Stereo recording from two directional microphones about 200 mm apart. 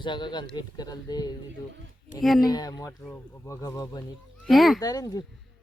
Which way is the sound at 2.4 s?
20° left (ahead or behind).